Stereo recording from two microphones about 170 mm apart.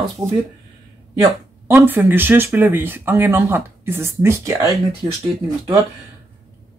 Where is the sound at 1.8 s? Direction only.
10° right (ahead or behind).